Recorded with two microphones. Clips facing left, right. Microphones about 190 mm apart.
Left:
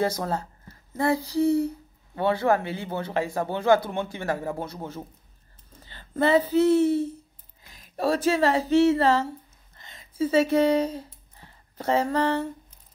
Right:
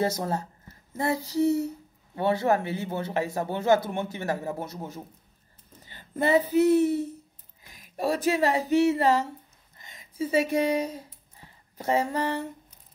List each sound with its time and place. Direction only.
0.0 s speech: 20° right (ahead or behind)
5.9 s a sound: 15° right (ahead or behind)
6.5 s speech: 15° right (ahead or behind)
11.9 s speech: 15° right (ahead or behind)